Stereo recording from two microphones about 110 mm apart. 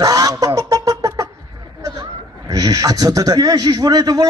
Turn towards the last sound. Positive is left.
turn(degrees=-35)  # may be behind; listen again after turning